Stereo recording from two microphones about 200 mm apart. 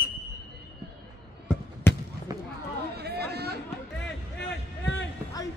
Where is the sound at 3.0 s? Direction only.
55° right (ahead or behind).